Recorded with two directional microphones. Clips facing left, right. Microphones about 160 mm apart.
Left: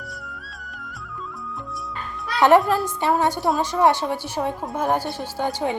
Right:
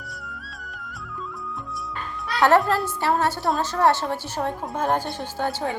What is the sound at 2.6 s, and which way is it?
A woman's voice, 15° left (ahead or behind).